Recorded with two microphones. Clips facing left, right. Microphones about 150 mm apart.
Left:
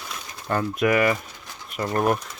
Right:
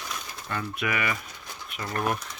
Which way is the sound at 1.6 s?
40° left (ahead or behind).